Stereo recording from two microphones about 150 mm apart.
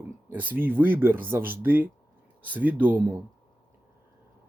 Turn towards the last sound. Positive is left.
turn(degrees=-10)  # may be behind; listen again after turning